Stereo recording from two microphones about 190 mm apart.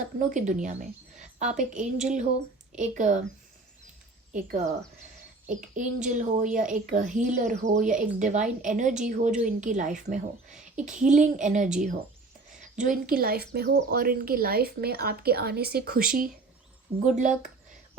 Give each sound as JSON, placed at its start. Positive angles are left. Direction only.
{"t": 0.2, "sound": "a woman's voice", "side_deg": -40}
{"t": 4.3, "sound": "a woman's voice", "side_deg": -40}